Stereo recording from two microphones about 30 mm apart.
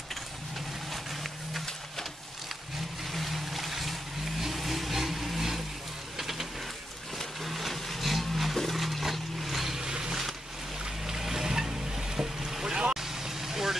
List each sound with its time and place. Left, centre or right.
3.1 s vehicle: centre
7.4 s vehicle: centre
8.5 s roaring cats: centre
8.8 s boat: centre
11.1 s boat: centre
12.9 s vehicle: centre